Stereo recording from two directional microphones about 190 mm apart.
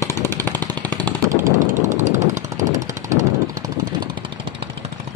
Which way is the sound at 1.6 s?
40° right (ahead or behind).